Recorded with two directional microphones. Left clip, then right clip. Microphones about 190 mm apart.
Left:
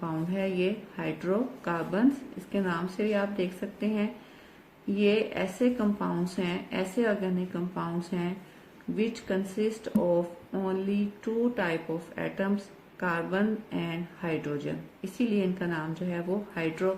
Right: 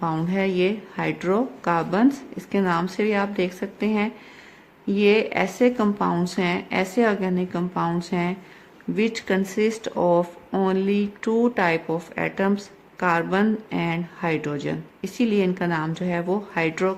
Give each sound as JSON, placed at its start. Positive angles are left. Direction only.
{"t": 0.0, "sound": "speech", "side_deg": -55}